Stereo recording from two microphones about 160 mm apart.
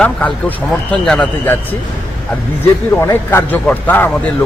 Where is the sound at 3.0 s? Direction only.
15° left (ahead or behind).